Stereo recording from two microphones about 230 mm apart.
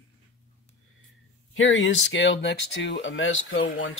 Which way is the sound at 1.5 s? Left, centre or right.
Left.